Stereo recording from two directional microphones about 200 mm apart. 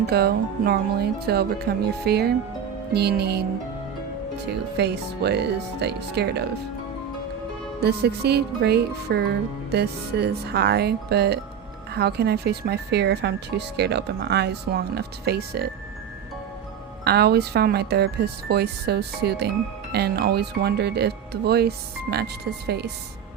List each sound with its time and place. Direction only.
0.1 s speech: 50° right (ahead or behind)
4.8 s speech: 55° right (ahead or behind)
7.8 s speech: 55° right (ahead or behind)
17.0 s speech: 55° right (ahead or behind)